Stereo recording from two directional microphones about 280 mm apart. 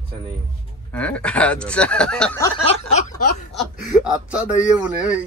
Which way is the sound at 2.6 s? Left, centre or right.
Left.